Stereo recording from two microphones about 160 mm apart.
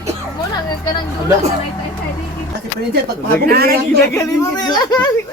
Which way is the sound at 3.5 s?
75° right (ahead or behind).